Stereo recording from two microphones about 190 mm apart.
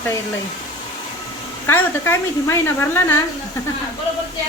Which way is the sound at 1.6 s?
15° left (ahead or behind).